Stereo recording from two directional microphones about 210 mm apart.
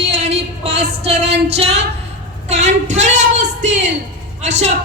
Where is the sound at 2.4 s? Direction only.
35° right (ahead or behind).